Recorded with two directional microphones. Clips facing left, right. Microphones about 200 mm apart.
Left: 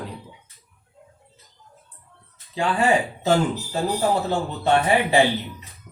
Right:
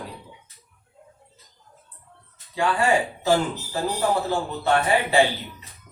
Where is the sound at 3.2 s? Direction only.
20° left (ahead or behind).